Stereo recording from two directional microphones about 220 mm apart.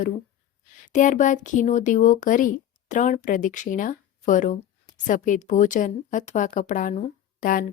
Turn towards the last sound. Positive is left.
turn(degrees=35)  # may be behind; listen again after turning